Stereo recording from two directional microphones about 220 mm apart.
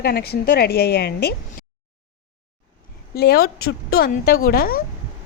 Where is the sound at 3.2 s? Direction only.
45° left (ahead or behind).